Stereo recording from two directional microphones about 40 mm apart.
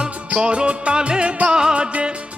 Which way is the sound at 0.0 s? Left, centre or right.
Right.